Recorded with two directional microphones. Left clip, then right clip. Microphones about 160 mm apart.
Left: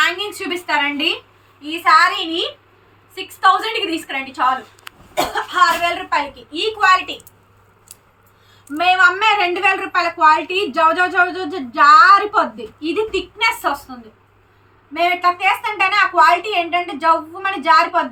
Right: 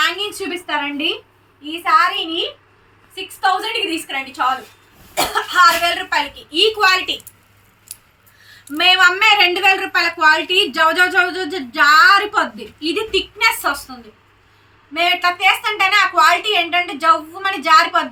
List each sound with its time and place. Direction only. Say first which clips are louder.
0.0 s a woman's voice: left 1 dB; 5° left (ahead or behind)
3.4 s a woman's voice: left 3 dB; 5° left (ahead or behind)
6.5 s a woman's voice: right 1 dB; 20° left (ahead or behind)
8.8 s a woman's voice: right 1 dB; 15° left (ahead or behind)
14.9 s speech: even; 5° left (ahead or behind)